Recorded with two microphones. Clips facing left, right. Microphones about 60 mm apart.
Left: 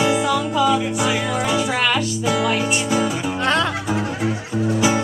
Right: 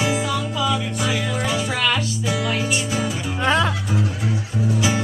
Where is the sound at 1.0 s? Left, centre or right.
Left.